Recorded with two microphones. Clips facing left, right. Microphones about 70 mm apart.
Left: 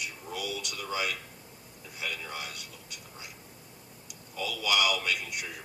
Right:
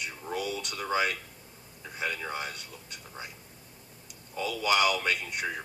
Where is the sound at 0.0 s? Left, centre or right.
Right.